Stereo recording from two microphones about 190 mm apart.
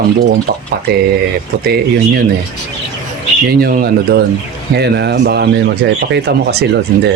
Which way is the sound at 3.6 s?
50° right (ahead or behind).